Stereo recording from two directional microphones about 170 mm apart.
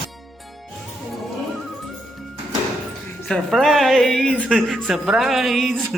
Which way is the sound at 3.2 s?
Centre (ahead or behind).